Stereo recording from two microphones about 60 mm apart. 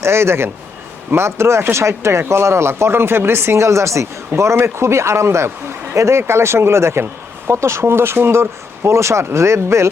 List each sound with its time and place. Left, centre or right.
0.0 s speech: right